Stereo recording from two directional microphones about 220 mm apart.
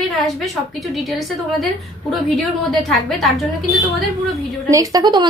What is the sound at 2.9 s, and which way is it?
Speech, centre (ahead or behind).